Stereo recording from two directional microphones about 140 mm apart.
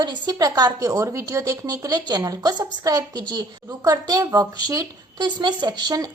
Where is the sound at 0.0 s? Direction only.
30° right (ahead or behind).